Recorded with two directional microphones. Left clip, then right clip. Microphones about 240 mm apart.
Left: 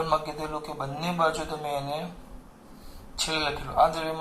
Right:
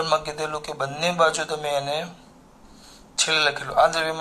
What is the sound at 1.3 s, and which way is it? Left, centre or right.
Speech, right.